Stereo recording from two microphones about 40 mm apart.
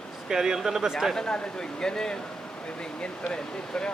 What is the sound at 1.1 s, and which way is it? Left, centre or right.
Speech, left.